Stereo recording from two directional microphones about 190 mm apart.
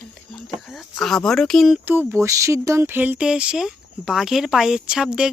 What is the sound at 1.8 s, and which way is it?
Speech, 10° right (ahead or behind).